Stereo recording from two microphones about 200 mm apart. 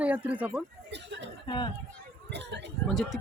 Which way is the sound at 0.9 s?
60° right (ahead or behind).